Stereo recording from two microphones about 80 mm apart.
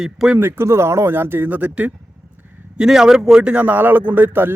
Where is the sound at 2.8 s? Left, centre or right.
Centre; by 4.5 s right.